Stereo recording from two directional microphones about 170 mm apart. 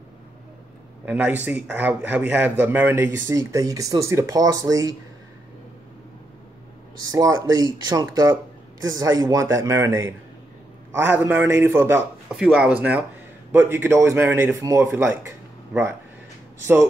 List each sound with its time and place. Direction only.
1.0 s speech: 10° right (ahead or behind)
7.0 s speech: 20° right (ahead or behind)